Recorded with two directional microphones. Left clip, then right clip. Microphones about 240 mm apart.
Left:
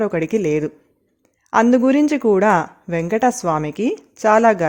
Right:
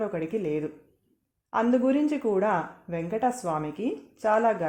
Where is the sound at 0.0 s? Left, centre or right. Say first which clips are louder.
Left 10 dB; left.